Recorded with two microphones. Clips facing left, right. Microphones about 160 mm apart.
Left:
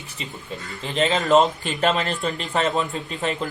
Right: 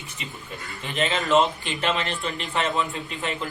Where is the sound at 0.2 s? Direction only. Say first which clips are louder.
Left 4 dB; 30° left (ahead or behind).